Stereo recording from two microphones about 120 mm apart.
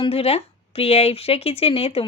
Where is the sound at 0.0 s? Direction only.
55° left (ahead or behind).